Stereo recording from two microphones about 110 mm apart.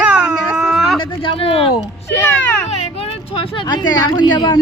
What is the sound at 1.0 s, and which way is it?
Speech, 50° left (ahead or behind).